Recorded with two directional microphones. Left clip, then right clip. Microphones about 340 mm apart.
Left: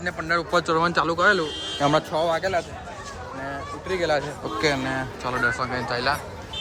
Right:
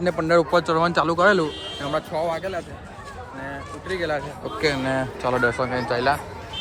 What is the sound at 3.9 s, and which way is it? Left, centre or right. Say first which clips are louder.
A man's voice: left 2 dB; centre.